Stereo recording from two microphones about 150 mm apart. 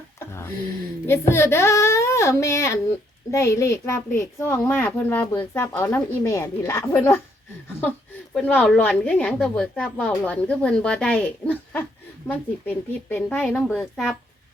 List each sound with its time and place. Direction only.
0.3 s a sound: 15° left (ahead or behind)
1.0 s a child's voice: 15° left (ahead or behind)
5.2 s speech: 30° left (ahead or behind)
5.5 s a woman's voice: 15° left (ahead or behind)
8.4 s a woman's voice: 5° left (ahead or behind)